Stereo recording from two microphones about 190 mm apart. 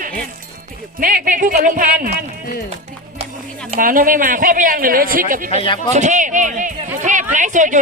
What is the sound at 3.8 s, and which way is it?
Speech, 45° right (ahead or behind).